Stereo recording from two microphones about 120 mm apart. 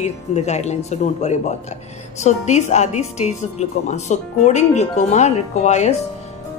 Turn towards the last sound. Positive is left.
turn(degrees=70)  # may be behind; listen again after turning